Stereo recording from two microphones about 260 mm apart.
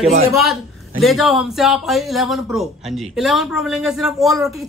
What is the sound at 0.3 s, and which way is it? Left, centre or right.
Speech, centre.